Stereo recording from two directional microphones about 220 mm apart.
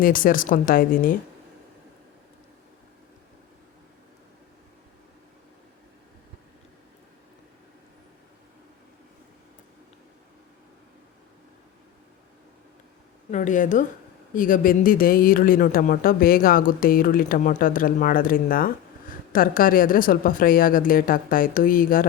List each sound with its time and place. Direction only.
0.0 s speech: 40° left (ahead or behind)
13.3 s speech: 35° left (ahead or behind)